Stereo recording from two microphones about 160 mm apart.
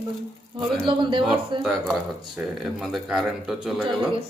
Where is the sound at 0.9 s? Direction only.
30° right (ahead or behind).